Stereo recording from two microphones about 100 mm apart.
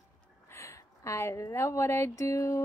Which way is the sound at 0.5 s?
30° left (ahead or behind).